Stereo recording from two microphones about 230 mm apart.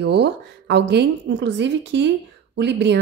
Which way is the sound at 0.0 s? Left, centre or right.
Right.